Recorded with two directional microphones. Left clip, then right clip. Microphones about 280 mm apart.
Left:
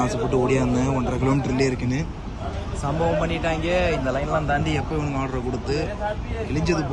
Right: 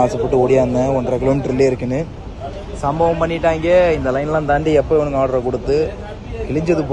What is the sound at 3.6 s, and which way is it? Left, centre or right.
A man's voice, centre.